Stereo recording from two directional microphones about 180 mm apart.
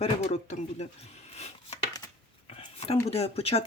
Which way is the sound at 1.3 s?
35° left (ahead or behind).